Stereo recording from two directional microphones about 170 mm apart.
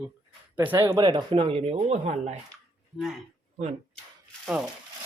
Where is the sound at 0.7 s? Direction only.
20° right (ahead or behind); by 2.3 s 40° right (ahead or behind).